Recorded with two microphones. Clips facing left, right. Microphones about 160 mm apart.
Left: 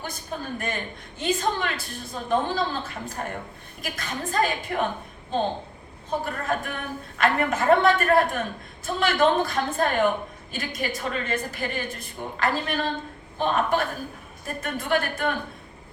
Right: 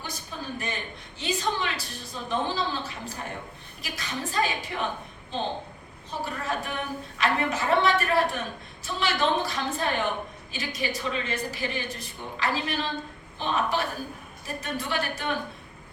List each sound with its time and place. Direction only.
0.0 s a woman's voice: 50° left (ahead or behind)
6.1 s a woman's voice: 50° left (ahead or behind)